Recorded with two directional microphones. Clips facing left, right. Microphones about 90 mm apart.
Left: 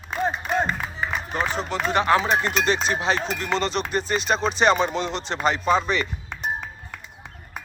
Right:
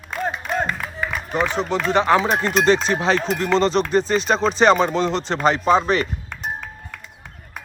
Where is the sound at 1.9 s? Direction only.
30° right (ahead or behind).